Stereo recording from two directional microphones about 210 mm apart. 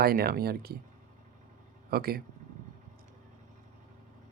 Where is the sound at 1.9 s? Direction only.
45° right (ahead or behind).